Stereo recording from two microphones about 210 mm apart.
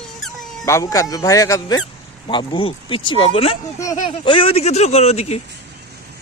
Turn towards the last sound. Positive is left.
turn(degrees=30)  # may be behind; listen again after turning